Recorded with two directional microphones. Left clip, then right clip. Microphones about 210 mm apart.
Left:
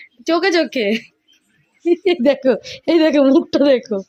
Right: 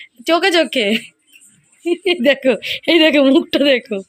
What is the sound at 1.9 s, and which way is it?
A woman's voice, 15° left (ahead or behind).